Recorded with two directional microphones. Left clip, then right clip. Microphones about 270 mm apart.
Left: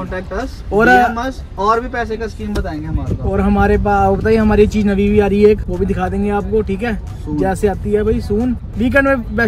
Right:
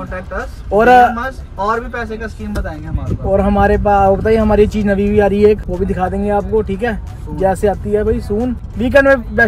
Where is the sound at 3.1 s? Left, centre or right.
Centre.